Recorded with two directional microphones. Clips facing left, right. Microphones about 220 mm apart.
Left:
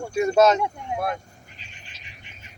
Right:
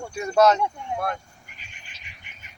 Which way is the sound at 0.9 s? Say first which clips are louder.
Left 3 dB; 10° left (ahead or behind).